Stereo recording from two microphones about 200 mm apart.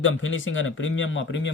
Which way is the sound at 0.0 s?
75° left (ahead or behind).